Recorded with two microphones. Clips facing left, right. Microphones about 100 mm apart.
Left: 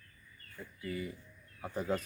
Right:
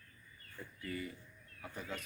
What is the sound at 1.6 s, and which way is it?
Speech, 35° left (ahead or behind).